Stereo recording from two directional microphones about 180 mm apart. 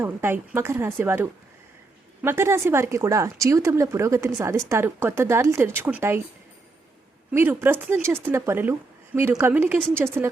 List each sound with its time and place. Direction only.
0.0 s speech: 10° right (ahead or behind)
7.3 s speech: 10° right (ahead or behind)